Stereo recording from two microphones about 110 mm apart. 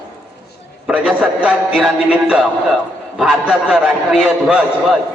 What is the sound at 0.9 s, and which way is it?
A man's voice, 10° right (ahead or behind).